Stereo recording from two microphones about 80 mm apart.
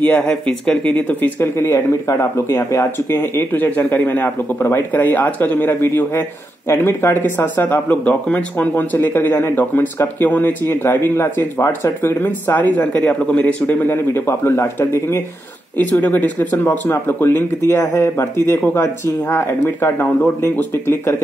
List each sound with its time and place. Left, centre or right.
0.0 s speech: centre
1.4 s speech: left; by 13.7 s centre
13.8 s speech: left
15.9 s speech: centre